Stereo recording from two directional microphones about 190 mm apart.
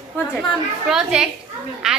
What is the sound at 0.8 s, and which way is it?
A woman's voice, 5° right (ahead or behind).